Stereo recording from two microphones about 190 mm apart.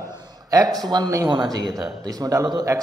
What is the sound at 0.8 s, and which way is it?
Speech, 20° right (ahead or behind).